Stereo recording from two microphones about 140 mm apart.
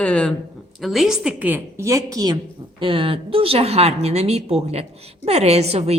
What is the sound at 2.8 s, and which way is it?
A woman's voice, 40° right (ahead or behind).